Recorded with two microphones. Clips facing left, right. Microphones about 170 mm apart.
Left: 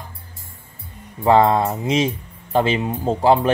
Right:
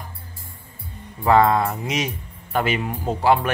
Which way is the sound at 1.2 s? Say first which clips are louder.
Left 2 dB; 25° left (ahead or behind).